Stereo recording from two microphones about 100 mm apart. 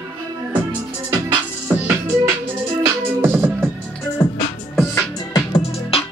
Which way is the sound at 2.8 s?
20° right (ahead or behind).